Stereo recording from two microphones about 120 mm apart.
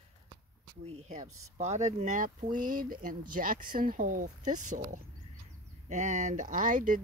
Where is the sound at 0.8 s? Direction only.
65° right (ahead or behind); by 3.6 s 90° right.